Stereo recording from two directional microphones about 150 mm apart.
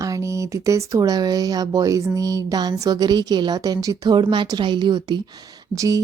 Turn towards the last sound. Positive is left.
turn(degrees=-25)  # may be behind; listen again after turning